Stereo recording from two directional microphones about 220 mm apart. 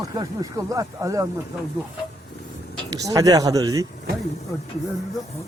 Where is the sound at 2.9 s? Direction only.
15° right (ahead or behind).